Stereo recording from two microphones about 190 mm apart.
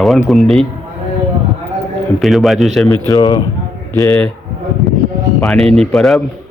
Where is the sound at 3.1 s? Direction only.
20° left (ahead or behind).